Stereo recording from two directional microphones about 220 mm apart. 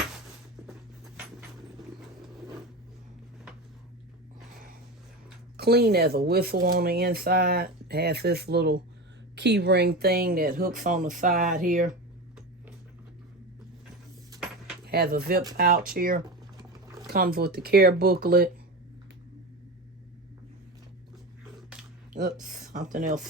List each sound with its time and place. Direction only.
5.5 s speech: 45° right (ahead or behind)
14.8 s speech: 45° right (ahead or behind)
22.1 s speech: 35° right (ahead or behind)